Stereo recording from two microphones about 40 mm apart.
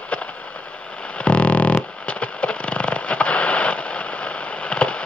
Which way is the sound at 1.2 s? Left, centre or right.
Left.